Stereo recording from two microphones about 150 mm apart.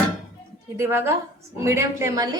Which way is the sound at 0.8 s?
15° right (ahead or behind).